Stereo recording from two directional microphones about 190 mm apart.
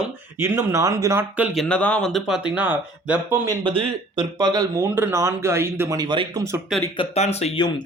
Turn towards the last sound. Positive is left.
turn(degrees=35)  # may be behind; listen again after turning